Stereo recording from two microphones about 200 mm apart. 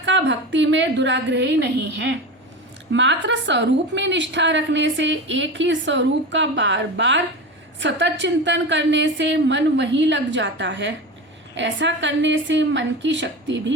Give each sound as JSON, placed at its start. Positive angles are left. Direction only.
{"t": 0.0, "sound": "a woman's voice", "side_deg": -65}